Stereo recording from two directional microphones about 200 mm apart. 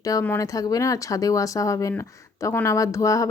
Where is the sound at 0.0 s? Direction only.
15° left (ahead or behind).